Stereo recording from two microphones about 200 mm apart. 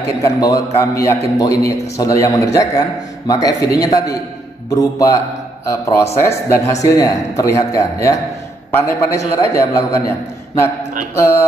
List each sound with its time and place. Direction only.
0.2 s a man's voice: 15° left (ahead or behind)
11.1 s a man's voice: 15° left (ahead or behind)